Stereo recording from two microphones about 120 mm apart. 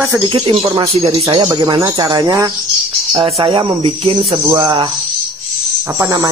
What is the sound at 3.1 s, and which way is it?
Speech, 45° right (ahead or behind).